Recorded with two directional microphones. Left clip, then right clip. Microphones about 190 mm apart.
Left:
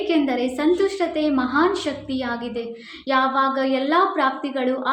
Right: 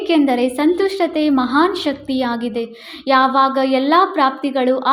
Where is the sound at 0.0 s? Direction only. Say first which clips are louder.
Right 6 dB; 50° right (ahead or behind).